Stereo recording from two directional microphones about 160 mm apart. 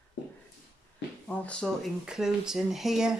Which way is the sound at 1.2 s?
5° left (ahead or behind).